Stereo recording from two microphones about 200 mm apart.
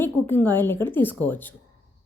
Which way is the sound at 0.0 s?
10° left (ahead or behind).